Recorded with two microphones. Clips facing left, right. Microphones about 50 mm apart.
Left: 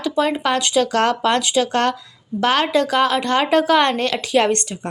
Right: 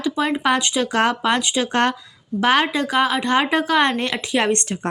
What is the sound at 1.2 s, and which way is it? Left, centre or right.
Speech, centre.